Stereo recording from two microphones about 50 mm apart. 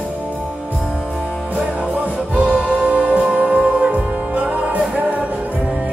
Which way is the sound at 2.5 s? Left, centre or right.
Centre.